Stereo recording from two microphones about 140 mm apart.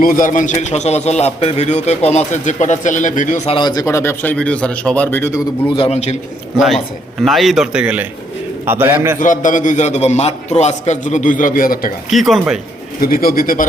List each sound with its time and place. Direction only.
0.0 s a man's voice: 75° left (ahead or behind); by 3.5 s 60° left (ahead or behind)
3.5 s a man's voice: 30° left (ahead or behind)
5.7 s a man's voice: 45° left (ahead or behind)
6.6 s a man's voice: centre (ahead or behind); by 9.1 s 15° right (ahead or behind)
9.1 s a man's voice: 70° left (ahead or behind); by 11.9 s 90° left
12.1 s a man's voice: centre (ahead or behind)
13.0 s speech: 90° left